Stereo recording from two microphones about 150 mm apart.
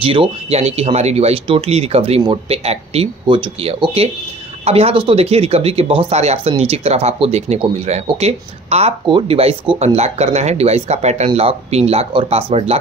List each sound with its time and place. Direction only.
0.0 s speech: 35° right (ahead or behind)